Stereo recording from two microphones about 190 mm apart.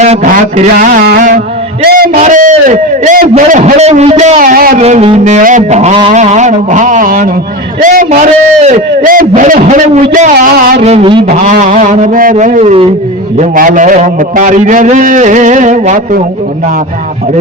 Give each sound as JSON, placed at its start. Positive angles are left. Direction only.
{"t": 0.0, "sound": "music", "side_deg": -35}
{"t": 2.1, "sound": "a man's voice", "side_deg": -45}
{"t": 4.8, "sound": "music", "side_deg": -35}
{"t": 7.8, "sound": "a man's voice", "side_deg": -45}
{"t": 10.8, "sound": "music", "side_deg": -30}
{"t": 11.4, "sound": "music", "side_deg": -40}
{"t": 13.3, "sound": "a man's voice", "side_deg": -40}